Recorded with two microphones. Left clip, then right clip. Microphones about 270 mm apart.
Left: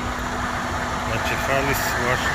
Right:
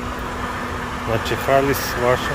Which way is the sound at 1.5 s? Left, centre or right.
Centre.